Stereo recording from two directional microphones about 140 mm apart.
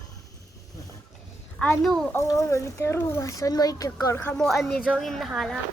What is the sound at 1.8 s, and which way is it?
Speech, centre (ahead or behind).